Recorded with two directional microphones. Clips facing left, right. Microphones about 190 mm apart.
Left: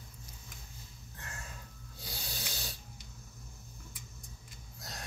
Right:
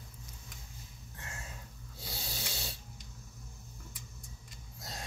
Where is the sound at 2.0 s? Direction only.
25° right (ahead or behind).